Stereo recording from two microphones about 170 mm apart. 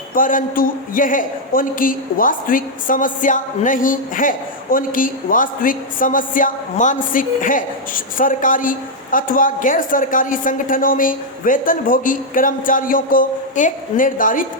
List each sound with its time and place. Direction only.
0.1 s speech: 55° left (ahead or behind)